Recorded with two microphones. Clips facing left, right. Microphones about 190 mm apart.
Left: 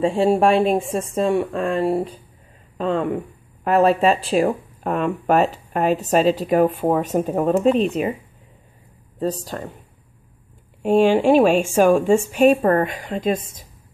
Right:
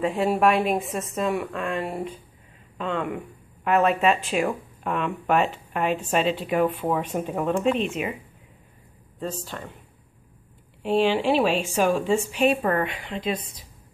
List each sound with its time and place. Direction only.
0.0 s speech: 30° left (ahead or behind)
9.2 s speech: 40° left (ahead or behind)
10.8 s a woman's voice: 45° left (ahead or behind)